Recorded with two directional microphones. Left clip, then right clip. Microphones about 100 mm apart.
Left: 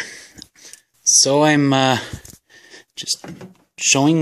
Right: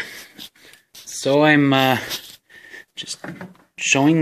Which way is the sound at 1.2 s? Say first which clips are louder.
Right 3 dB; 25° left (ahead or behind).